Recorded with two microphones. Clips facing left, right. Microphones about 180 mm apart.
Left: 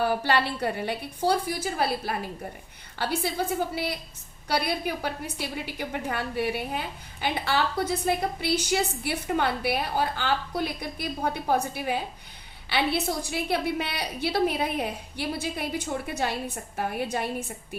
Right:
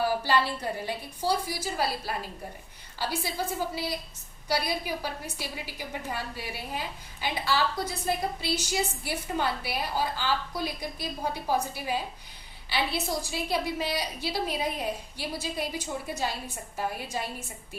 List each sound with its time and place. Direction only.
0.0 s a woman's voice: 60° left (ahead or behind)